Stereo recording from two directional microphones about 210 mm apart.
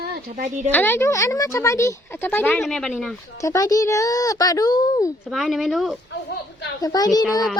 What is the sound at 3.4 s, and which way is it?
A woman's voice, 15° left (ahead or behind).